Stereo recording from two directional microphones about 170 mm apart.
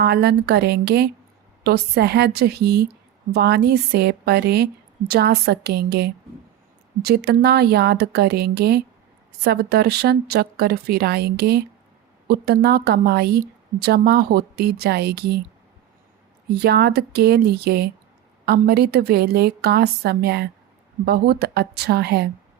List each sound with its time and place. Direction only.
0.0 s a woman's voice: 70° right (ahead or behind)
16.6 s a woman's voice: 70° right (ahead or behind)